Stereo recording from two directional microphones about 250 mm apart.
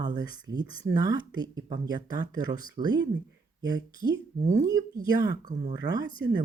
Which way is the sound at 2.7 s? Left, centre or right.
Centre.